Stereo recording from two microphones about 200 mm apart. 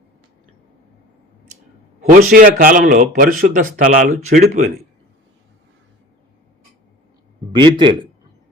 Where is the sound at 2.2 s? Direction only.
45° right (ahead or behind).